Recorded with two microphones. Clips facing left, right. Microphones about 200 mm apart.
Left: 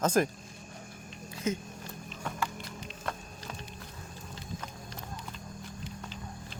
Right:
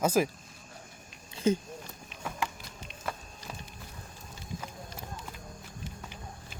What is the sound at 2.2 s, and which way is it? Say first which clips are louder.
Music: even; 5° right (ahead or behind).